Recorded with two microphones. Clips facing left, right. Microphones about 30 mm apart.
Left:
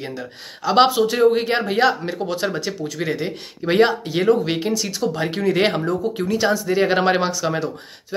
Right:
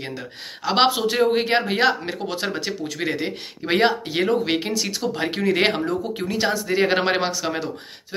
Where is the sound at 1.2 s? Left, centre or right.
Right.